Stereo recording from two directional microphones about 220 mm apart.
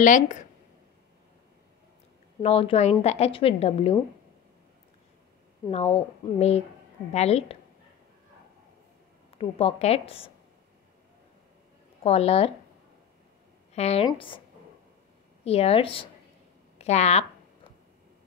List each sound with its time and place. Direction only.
0.0 s speech: 35° left (ahead or behind)
2.4 s a woman's voice: 25° left (ahead or behind)
5.7 s a woman's voice: 30° left (ahead or behind)
9.3 s a woman's voice: 25° left (ahead or behind)
12.0 s a woman's voice: 25° left (ahead or behind)
13.7 s a woman's voice: 30° left (ahead or behind)
15.4 s a woman's voice: 25° left (ahead or behind)